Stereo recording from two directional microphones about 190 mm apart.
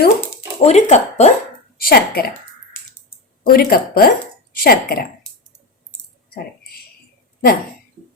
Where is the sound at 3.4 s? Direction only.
50° left (ahead or behind).